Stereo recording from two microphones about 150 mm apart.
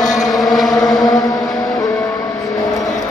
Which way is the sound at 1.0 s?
25° left (ahead or behind).